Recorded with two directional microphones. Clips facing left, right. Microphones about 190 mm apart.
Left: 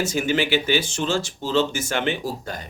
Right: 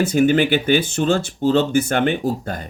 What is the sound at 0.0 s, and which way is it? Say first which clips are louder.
Speech: right 7 dB; 55° right (ahead or behind).